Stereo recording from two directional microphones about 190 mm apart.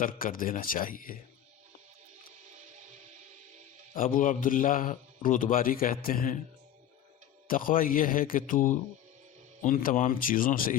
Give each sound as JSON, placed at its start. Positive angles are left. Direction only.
{"t": 0.0, "sound": "a man's voice", "side_deg": 45}
{"t": 3.9, "sound": "a man's voice", "side_deg": 45}
{"t": 7.4, "sound": "a man's voice", "side_deg": 45}